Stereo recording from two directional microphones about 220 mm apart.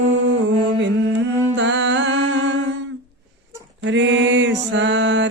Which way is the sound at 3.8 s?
55° right (ahead or behind).